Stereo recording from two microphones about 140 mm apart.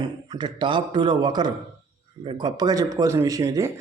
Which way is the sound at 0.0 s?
30° right (ahead or behind).